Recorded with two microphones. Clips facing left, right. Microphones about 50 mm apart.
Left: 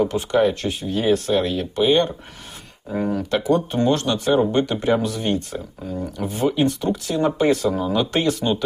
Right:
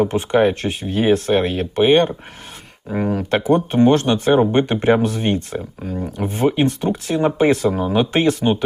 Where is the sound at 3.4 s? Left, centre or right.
Right.